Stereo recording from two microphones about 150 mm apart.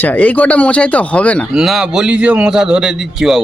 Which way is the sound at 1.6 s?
5° right (ahead or behind).